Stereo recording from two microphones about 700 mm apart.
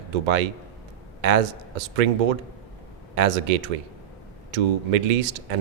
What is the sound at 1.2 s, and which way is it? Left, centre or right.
Speech, right.